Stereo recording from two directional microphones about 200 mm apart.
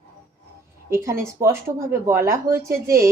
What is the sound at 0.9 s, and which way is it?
Speech, 15° right (ahead or behind).